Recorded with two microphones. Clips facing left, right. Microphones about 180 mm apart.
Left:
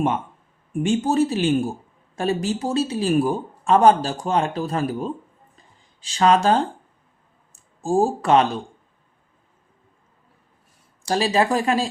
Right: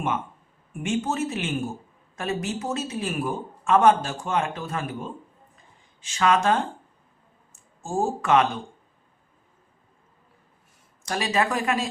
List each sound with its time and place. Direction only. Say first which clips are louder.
0.7 s a man's voice: left 6 dB; 30° left (ahead or behind)
11.0 s a man's voice: left 5 dB; 30° left (ahead or behind)